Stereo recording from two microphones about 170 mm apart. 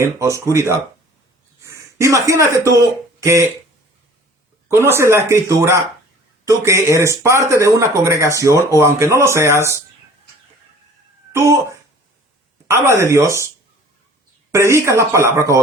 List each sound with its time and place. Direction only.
0.0 s speech: 15° right (ahead or behind)
4.7 s speech: 15° right (ahead or behind)
11.3 s speech: 15° right (ahead or behind)
14.5 s speech: 15° right (ahead or behind)